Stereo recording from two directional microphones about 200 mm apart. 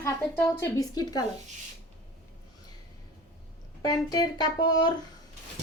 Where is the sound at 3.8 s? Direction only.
20° left (ahead or behind).